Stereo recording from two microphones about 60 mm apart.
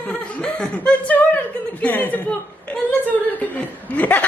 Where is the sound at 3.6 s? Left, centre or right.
Left.